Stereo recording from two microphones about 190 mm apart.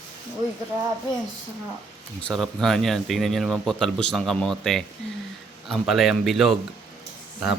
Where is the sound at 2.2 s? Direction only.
Centre (ahead or behind).